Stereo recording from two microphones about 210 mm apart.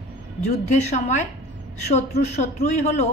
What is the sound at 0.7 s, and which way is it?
A man's voice, 35° left (ahead or behind).